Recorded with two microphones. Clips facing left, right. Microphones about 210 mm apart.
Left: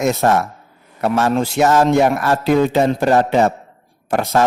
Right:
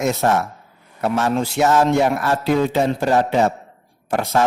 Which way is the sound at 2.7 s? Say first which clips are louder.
Left 3 dB; 60° left (ahead or behind).